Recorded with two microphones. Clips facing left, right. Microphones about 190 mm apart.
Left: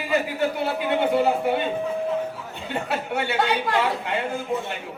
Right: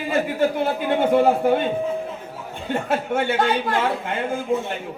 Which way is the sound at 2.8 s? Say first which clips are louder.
Right 5 dB; 45° right (ahead or behind).